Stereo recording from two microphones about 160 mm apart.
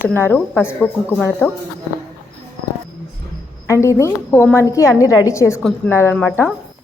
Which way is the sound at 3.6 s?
20° left (ahead or behind).